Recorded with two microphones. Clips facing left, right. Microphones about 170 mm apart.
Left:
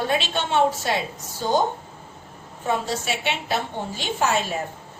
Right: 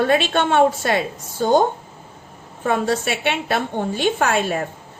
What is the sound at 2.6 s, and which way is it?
A woman's voice, 55° right (ahead or behind).